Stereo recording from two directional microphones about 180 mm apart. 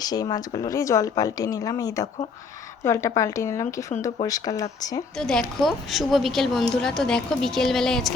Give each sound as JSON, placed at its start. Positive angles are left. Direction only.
{"t": 0.0, "sound": "a woman's voice", "side_deg": 20}
{"t": 5.1, "sound": "a woman's voice", "side_deg": 5}